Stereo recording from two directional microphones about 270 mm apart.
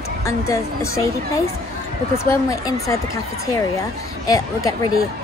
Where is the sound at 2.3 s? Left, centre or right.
Centre.